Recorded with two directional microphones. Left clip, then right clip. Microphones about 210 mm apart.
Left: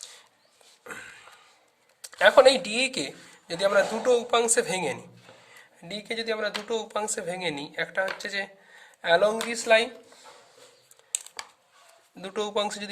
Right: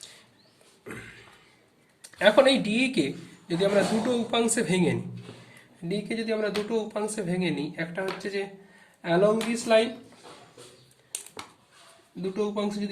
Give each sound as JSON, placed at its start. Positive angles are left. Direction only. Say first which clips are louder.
{"t": 2.0, "sound": "a man's voice", "louder": "left 2 dB", "side_deg": 45}
{"t": 12.3, "sound": "speech", "louder": "left 2 dB", "side_deg": 55}